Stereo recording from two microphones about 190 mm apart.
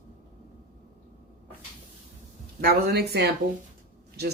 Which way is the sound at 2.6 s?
55° right (ahead or behind).